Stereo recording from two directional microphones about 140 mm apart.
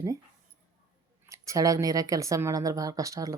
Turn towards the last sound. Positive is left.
turn(degrees=-25)  # may be behind; listen again after turning